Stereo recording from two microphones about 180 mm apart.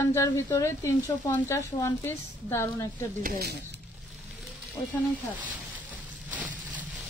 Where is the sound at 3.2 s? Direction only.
60° right (ahead or behind).